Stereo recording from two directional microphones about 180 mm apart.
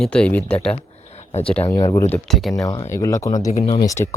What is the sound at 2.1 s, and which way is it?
Speech, centre (ahead or behind).